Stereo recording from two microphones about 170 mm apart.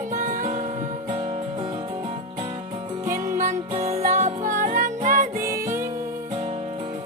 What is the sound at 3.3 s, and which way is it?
Music, 45° right (ahead or behind).